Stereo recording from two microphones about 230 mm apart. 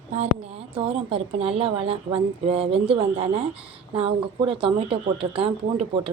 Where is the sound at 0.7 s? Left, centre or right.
Right.